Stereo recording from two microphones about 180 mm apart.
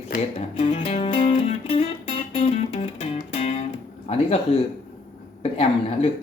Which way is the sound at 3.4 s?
35° left (ahead or behind).